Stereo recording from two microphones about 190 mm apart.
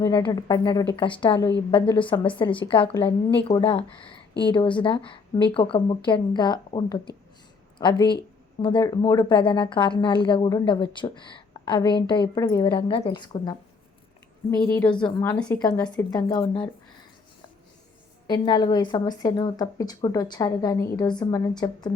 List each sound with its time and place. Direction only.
0.0 s a woman's voice: 20° left (ahead or behind)
14.7 s a woman's voice: 10° left (ahead or behind)
16.1 s a woman's voice: 15° left (ahead or behind)
18.3 s a woman's voice: 20° left (ahead or behind)